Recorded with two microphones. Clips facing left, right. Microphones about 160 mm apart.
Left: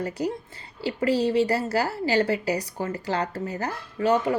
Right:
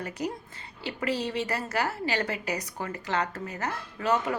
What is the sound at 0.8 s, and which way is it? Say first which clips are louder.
A woman's voice: left 7 dB; 30° left (ahead or behind).